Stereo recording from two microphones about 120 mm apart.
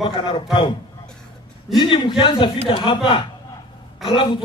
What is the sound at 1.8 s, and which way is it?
A man's voice, 40° left (ahead or behind).